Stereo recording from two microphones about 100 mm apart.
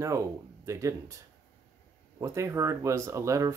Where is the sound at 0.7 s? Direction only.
30° right (ahead or behind).